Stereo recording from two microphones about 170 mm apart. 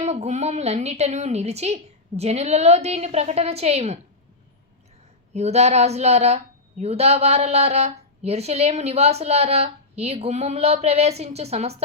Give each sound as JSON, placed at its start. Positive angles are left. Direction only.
{"t": 0.0, "sound": "a woman's voice", "side_deg": -40}
{"t": 5.3, "sound": "a woman's voice", "side_deg": -40}